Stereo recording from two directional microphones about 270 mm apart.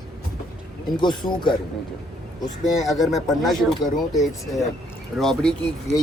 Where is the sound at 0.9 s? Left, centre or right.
Centre.